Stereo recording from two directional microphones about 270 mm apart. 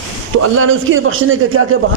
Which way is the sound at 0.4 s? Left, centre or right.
Right.